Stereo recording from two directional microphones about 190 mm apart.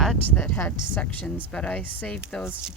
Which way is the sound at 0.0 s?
5° left (ahead or behind).